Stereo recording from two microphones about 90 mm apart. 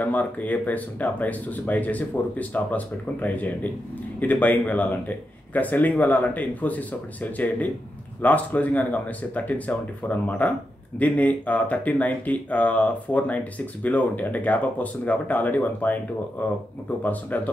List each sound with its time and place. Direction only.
0.0 s speech: 20° left (ahead or behind)